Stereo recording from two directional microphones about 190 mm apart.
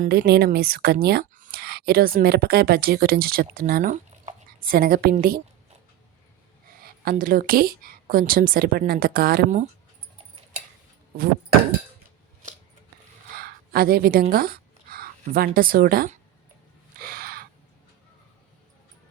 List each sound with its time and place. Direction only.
0.0 s speech: 55° right (ahead or behind)
6.7 s speech: 50° right (ahead or behind)
13.3 s a woman's voice: 50° right (ahead or behind)
17.0 s gasp: 50° right (ahead or behind)